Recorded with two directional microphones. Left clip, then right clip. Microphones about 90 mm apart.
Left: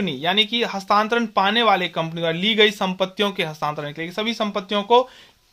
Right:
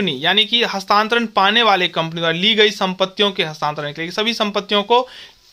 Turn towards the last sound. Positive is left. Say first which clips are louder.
# right 2 dB
turn(degrees=-25)  # may be behind; listen again after turning